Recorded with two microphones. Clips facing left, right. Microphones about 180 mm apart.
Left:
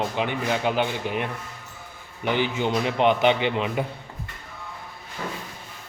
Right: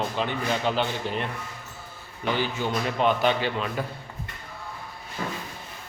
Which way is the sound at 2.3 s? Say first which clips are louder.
Left 3 dB; 15° left (ahead or behind).